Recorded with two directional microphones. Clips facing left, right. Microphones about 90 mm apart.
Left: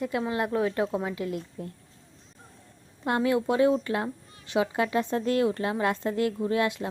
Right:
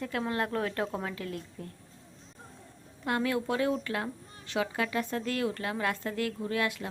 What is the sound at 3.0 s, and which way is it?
Speech, 25° left (ahead or behind).